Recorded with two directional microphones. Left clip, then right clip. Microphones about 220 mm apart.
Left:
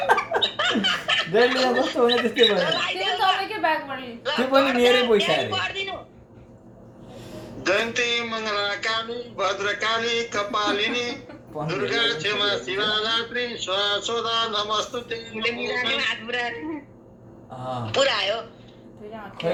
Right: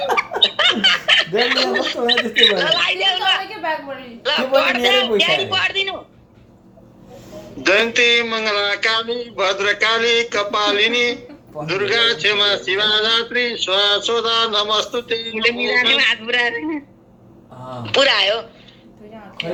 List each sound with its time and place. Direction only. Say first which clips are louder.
0.4 s laughter: right 8 dB; 35° right (ahead or behind)
1.4 s a man's voice: right 2 dB; 35° right (ahead or behind)
7.6 s a man's voice: right 8 dB; 35° right (ahead or behind)
17.8 s a man's voice: right 7 dB; 35° right (ahead or behind)